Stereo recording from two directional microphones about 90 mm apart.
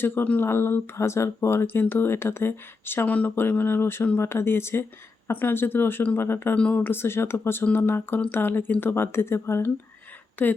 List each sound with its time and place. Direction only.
0.0 s speech: 25° left (ahead or behind)
6.6 s speech: 15° left (ahead or behind)